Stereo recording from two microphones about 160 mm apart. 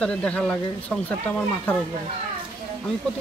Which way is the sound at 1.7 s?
10° left (ahead or behind).